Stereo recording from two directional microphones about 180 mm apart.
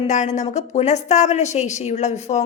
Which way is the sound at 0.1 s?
40° left (ahead or behind).